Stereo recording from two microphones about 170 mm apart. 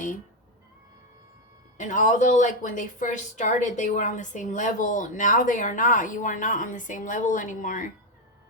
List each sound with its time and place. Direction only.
1.8 s a woman's voice: 45° left (ahead or behind)